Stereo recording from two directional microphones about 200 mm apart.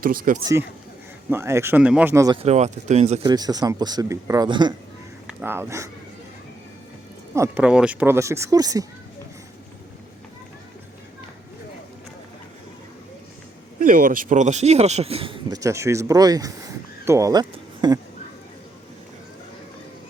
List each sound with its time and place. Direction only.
0.0 s speech: 45° right (ahead or behind)
0.4 s speech: 15° right (ahead or behind)
2.4 s speech: 35° right (ahead or behind)
3.2 s speech: 20° right (ahead or behind)
5.4 s speech: 10° right (ahead or behind)
7.3 s speech: 10° right (ahead or behind)
13.7 s speech: 45° right (ahead or behind); by 18.0 s 20° right (ahead or behind)